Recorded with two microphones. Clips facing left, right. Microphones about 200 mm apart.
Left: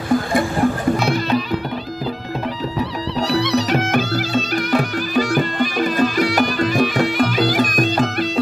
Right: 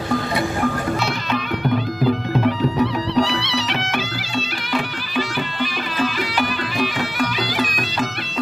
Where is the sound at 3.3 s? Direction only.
40° left (ahead or behind).